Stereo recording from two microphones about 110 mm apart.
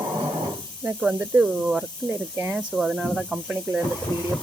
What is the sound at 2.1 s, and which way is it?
Speech, 20° right (ahead or behind).